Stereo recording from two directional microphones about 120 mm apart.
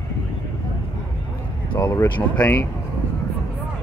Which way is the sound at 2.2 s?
20° left (ahead or behind).